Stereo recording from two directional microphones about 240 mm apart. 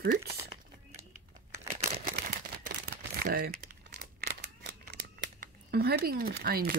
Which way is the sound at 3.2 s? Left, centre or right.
Right.